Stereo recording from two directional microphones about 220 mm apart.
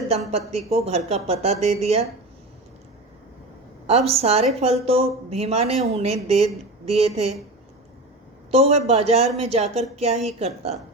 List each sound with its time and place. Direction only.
0.3 s speech: 30° right (ahead or behind)
3.8 s speech: 30° right (ahead or behind)
8.4 s speech: 30° right (ahead or behind)